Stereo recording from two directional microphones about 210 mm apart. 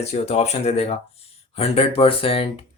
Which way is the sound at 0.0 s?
30° left (ahead or behind).